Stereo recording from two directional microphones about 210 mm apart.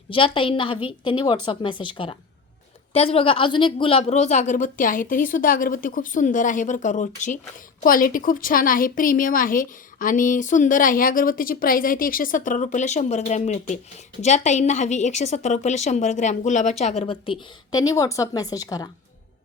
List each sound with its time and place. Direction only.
0.1 s a woman's voice: 25° left (ahead or behind)